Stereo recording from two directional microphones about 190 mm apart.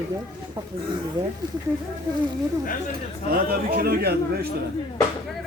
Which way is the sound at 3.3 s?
50° right (ahead or behind).